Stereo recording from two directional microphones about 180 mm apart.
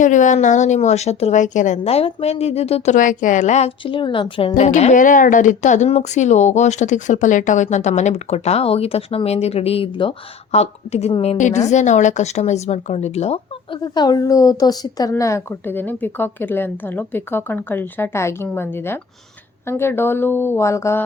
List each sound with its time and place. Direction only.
0.0 s a woman's voice: 45° left (ahead or behind)
13.8 s a woman's voice: 20° left (ahead or behind)